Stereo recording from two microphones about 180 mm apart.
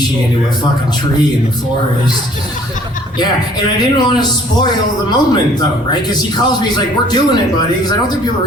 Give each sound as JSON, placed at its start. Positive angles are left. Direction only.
{"t": 3.8, "sound": "a man's voice", "side_deg": 25}